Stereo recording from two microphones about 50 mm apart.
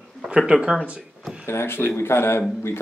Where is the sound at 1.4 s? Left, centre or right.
Left.